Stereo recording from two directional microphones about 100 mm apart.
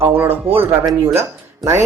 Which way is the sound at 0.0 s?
20° right (ahead or behind).